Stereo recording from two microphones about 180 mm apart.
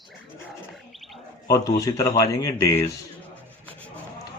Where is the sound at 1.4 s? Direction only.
20° left (ahead or behind).